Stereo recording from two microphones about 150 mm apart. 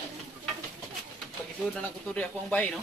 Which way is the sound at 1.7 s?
10° left (ahead or behind).